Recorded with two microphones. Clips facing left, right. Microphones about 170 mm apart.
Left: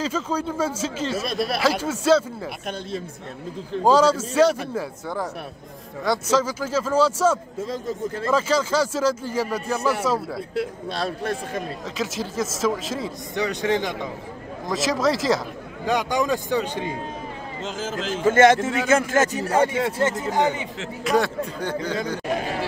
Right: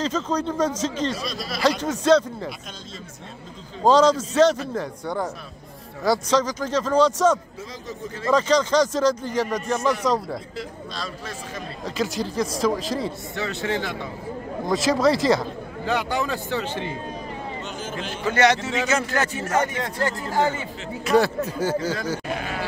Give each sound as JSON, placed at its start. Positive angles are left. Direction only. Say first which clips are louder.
{"t": 0.0, "sound": "speech", "louder": "right 1 dB", "side_deg": 10}
{"t": 1.2, "sound": "speech", "louder": "left 6 dB", "side_deg": 60}
{"t": 1.6, "sound": "speech", "louder": "right 6 dB", "side_deg": 5}
{"t": 3.8, "sound": "speech", "louder": "right 1 dB", "side_deg": 10}
{"t": 10.5, "sound": "speech", "louder": "left 7 dB", "side_deg": 60}
{"t": 12.0, "sound": "speech", "louder": "right 2 dB", "side_deg": 0}
{"t": 13.4, "sound": "speech", "louder": "left 4 dB", "side_deg": 15}
{"t": 14.7, "sound": "speech", "louder": "right 2 dB", "side_deg": 0}
{"t": 15.8, "sound": "speech", "louder": "left 2 dB", "side_deg": 15}
{"t": 17.6, "sound": "speech", "louder": "left 3 dB", "side_deg": 90}
{"t": 18.1, "sound": "a man's voice", "louder": "left 5 dB", "side_deg": 45}
{"t": 20.0, "sound": "speech", "louder": "right 1 dB", "side_deg": 20}
{"t": 21.0, "sound": "speech", "louder": "right 2 dB", "side_deg": 0}